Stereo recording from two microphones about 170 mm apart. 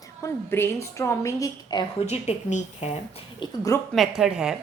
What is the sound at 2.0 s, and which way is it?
Speech, 40° left (ahead or behind).